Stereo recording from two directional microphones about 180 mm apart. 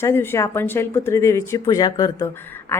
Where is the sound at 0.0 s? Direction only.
15° left (ahead or behind).